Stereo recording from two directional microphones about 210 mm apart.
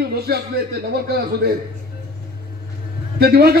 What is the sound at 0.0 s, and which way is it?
Speech, 50° right (ahead or behind).